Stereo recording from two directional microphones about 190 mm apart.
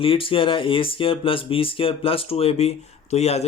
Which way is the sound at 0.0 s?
30° left (ahead or behind).